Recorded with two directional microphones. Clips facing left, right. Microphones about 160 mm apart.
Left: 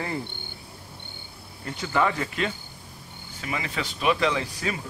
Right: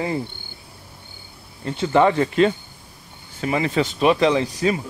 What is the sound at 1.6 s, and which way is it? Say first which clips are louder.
Speech: right 8 dB; 30° right (ahead or behind).